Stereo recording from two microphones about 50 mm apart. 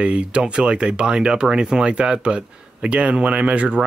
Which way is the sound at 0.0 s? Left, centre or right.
Right.